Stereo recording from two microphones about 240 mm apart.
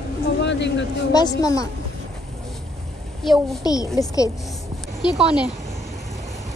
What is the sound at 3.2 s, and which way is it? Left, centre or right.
Speech, centre.